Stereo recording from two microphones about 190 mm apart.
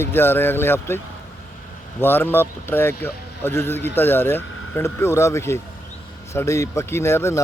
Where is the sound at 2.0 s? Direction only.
10° left (ahead or behind).